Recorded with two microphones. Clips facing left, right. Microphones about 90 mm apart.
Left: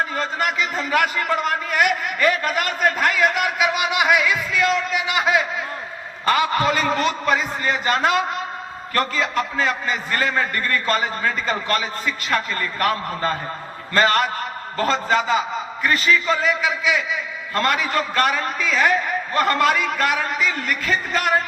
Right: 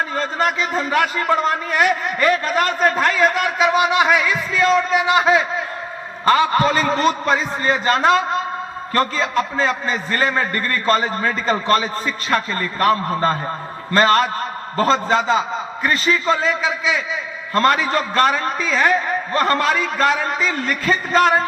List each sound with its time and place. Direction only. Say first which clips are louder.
0.2 s a man's voice: right 3 dB; 35° right (ahead or behind)
9.0 s a man's voice: right 3 dB; 35° right (ahead or behind)